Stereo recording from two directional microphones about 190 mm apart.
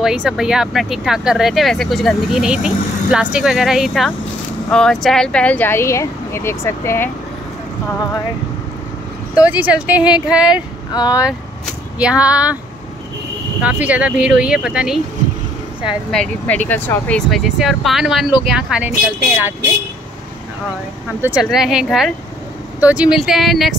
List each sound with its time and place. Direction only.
0.0 s speech: 5° right (ahead or behind); by 7.1 s 15° left (ahead or behind)
9.3 s speech: 5° right (ahead or behind)
10.5 s speech: 20° left (ahead or behind)
12.0 s speech: 5° right (ahead or behind)
13.6 s speech: 5° right (ahead or behind)
21.2 s speech: 5° right (ahead or behind)